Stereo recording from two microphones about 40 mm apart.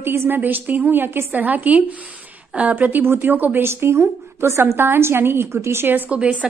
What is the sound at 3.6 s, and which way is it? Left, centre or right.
A woman's voice, right.